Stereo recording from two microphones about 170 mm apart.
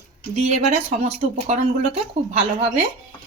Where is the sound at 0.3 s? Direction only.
40° right (ahead or behind).